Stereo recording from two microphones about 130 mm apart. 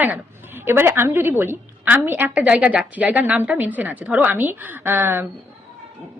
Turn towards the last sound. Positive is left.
turn(degrees=-15)  # may be behind; listen again after turning